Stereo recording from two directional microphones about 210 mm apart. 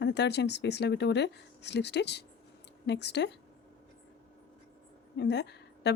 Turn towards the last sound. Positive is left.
turn(degrees=50)  # may be behind; listen again after turning